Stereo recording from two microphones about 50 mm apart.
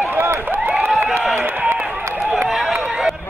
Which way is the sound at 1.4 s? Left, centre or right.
Right.